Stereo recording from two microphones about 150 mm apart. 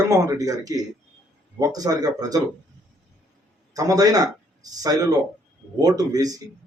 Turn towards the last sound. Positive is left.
turn(degrees=-25)  # may be behind; listen again after turning